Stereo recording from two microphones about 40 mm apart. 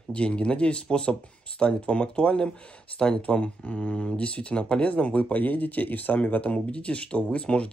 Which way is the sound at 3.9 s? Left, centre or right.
Left.